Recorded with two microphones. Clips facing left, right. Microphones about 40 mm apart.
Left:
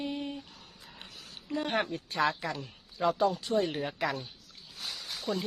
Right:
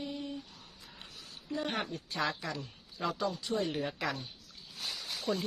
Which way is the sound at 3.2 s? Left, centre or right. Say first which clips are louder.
Left 4 dB; left.